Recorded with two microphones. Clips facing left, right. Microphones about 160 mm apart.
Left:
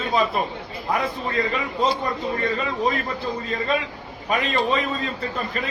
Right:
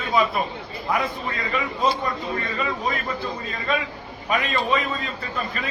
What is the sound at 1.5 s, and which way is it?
Speech, 20° left (ahead or behind).